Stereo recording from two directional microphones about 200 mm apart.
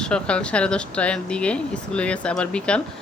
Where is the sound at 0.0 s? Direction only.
5° left (ahead or behind).